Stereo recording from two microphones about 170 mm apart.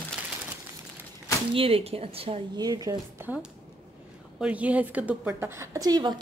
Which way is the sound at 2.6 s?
25° right (ahead or behind).